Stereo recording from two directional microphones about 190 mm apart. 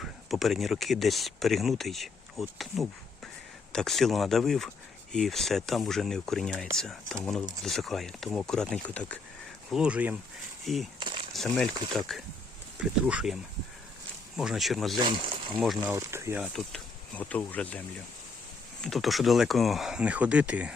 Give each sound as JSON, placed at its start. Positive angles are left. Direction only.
{"t": 0.0, "sound": "speech", "side_deg": 0}
{"t": 9.7, "sound": "speech", "side_deg": -5}
{"t": 14.9, "sound": "speech", "side_deg": -25}
{"t": 15.9, "sound": "speech", "side_deg": -15}
{"t": 16.4, "sound": "speech", "side_deg": 0}